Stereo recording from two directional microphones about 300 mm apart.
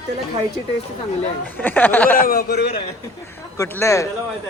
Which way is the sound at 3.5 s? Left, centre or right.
Centre.